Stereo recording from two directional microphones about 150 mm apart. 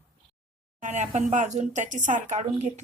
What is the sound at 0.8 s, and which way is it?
Speech, 50° right (ahead or behind).